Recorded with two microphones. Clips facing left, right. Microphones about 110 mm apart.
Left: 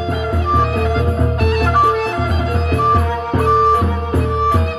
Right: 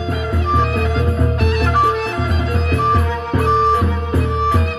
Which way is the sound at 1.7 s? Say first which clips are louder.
Left 2 dB; 45° left (ahead or behind).